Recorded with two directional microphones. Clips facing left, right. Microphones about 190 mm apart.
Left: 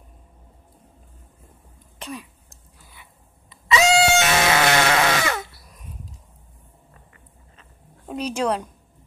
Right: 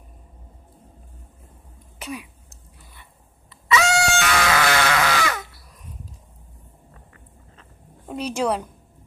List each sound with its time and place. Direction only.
2.0 s throat clearing: 5° right (ahead or behind)
3.7 s music: 20° left (ahead or behind)
8.2 s a woman's voice: 10° right (ahead or behind)